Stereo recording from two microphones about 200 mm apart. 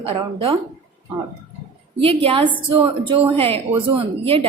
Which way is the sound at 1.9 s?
25° right (ahead or behind).